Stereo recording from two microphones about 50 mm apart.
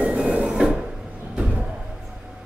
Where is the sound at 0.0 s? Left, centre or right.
Right.